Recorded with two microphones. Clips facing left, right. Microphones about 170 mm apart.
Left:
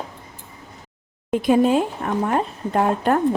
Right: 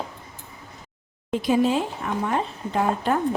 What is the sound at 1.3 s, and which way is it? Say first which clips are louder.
A woman's voice: left 4 dB; 55° left (ahead or behind).